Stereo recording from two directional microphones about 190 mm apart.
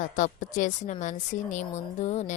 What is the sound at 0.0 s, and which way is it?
A woman's voice, 40° left (ahead or behind).